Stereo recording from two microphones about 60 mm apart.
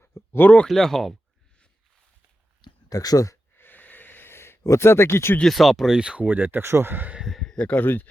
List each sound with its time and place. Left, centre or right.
0.0 s a sound: left
0.7 s speech: centre
2.9 s speech: left
3.6 s a sound: left
4.8 s speech: left
5.4 s speech: centre
6.2 s speech: right
6.6 s speech: right
6.9 s speech: right
7.5 s speech: left